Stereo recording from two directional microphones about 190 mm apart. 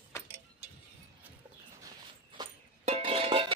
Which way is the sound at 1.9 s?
25° right (ahead or behind).